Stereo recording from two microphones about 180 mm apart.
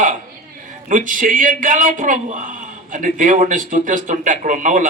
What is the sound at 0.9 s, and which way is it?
A man's voice, 45° right (ahead or behind).